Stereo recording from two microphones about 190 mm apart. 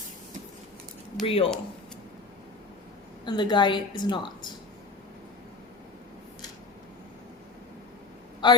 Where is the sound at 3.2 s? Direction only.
25° left (ahead or behind).